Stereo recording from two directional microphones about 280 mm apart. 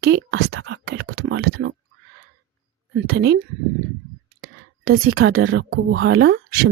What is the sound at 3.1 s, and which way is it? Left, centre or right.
Speech, right.